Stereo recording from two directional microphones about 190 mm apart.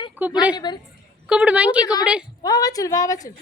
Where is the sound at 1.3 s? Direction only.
5° right (ahead or behind).